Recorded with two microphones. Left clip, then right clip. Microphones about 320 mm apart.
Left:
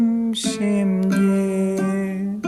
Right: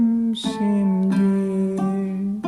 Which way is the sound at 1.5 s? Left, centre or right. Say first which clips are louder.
Left 2 dB; left.